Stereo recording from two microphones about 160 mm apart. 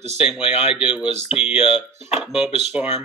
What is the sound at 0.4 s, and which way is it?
Speech, 35° left (ahead or behind).